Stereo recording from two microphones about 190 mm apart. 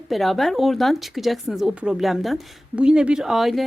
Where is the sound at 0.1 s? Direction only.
Centre (ahead or behind).